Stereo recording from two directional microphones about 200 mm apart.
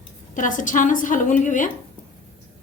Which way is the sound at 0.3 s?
40° left (ahead or behind).